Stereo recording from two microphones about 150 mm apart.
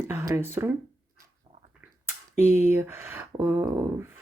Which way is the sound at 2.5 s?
15° right (ahead or behind).